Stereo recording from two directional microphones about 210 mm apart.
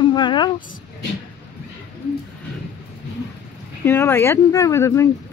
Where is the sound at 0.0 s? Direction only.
20° left (ahead or behind).